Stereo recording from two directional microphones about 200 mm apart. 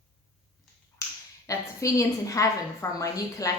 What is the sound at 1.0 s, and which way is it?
Finger snapping, 15° left (ahead or behind).